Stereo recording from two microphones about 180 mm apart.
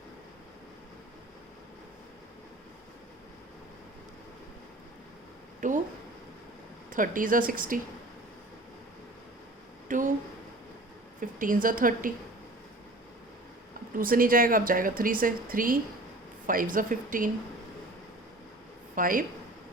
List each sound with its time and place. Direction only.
5.5 s a sound: 45° right (ahead or behind)
6.9 s speech: 50° right (ahead or behind)
9.9 s a sound: 45° right (ahead or behind)
11.2 s a woman's voice: 50° right (ahead or behind)
14.0 s speech: 50° right (ahead or behind)
18.9 s speech: 50° right (ahead or behind)